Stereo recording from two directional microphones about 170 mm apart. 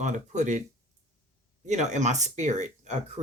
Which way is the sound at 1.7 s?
45° right (ahead or behind).